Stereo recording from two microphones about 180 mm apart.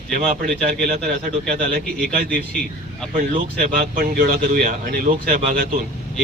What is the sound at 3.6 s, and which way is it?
A man's voice, 55° right (ahead or behind).